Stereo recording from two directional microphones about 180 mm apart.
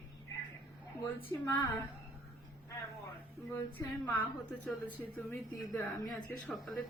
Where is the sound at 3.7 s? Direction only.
10° left (ahead or behind).